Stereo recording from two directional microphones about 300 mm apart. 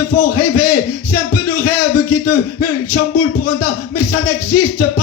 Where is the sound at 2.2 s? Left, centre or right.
Left.